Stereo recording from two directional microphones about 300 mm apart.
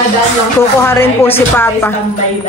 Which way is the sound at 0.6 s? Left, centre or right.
Centre.